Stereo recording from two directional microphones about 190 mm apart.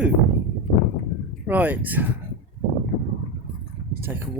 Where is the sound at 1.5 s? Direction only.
10° right (ahead or behind).